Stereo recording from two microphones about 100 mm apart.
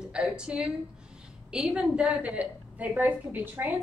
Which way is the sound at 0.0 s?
10° right (ahead or behind).